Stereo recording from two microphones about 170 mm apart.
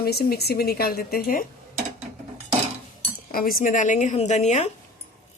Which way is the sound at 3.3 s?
55° left (ahead or behind).